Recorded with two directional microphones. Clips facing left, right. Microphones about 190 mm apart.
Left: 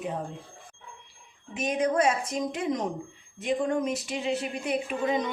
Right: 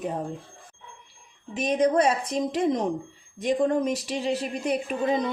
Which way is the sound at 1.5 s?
35° right (ahead or behind).